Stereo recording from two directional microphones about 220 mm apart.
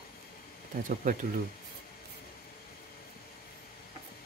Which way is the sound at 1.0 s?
40° right (ahead or behind).